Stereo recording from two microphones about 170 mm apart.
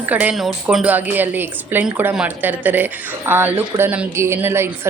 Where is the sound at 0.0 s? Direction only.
10° right (ahead or behind).